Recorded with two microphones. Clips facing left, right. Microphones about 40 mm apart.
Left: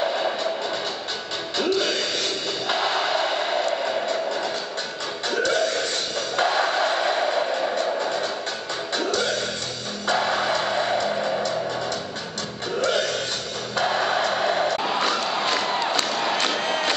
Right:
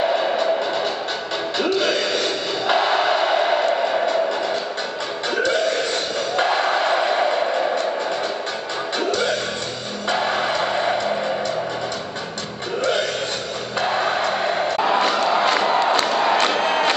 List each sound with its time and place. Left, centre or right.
0.0 s music: centre
1.6 s a sound: centre
5.3 s music: centre
13.7 s music: right
14.8 s crowd: centre
15.8 s crowd: right
16.1 s a sound: centre
16.3 s music: right